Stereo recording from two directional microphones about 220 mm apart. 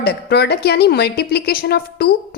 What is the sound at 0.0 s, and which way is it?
A woman's voice, 45° left (ahead or behind).